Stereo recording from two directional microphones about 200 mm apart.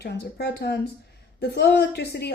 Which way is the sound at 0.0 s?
55° left (ahead or behind).